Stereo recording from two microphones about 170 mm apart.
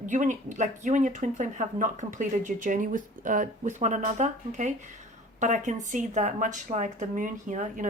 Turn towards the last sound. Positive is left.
turn(degrees=-50)  # may be behind; listen again after turning